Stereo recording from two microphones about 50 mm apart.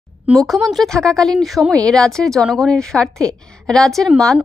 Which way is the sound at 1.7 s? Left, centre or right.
Centre.